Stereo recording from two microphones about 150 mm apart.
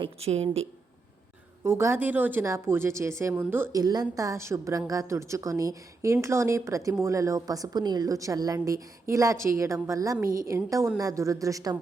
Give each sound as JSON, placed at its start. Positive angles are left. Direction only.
{"t": 0.0, "sound": "a woman's voice", "side_deg": -45}
{"t": 1.6, "sound": "a woman's voice", "side_deg": -20}
{"t": 10.2, "sound": "a woman's voice", "side_deg": -70}
{"t": 10.5, "sound": "a woman's voice", "side_deg": -20}